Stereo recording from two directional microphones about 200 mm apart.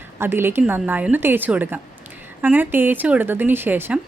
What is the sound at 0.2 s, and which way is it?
A woman's voice, 10° right (ahead or behind).